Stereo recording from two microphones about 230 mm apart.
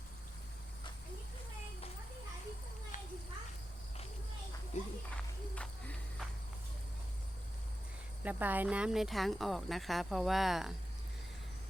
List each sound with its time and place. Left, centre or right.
2.9 s children playing: left
4.7 s a sound: left
5.1 s walk: centre
8.2 s speech: centre